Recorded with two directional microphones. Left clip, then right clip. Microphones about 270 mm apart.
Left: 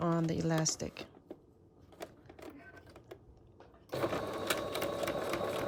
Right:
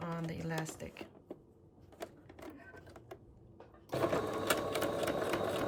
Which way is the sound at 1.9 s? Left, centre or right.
Centre.